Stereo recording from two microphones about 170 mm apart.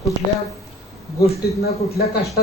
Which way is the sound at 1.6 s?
65° left (ahead or behind).